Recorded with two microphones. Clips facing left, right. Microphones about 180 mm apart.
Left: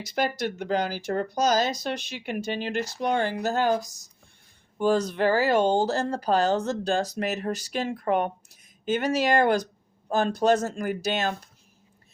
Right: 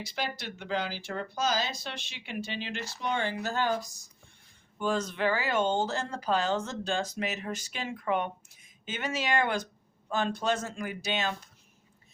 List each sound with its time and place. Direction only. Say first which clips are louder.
0.0 s speech: left 9 dB; 45° left (ahead or behind)